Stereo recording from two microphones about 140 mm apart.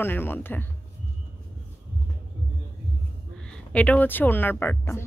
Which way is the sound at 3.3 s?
5° left (ahead or behind).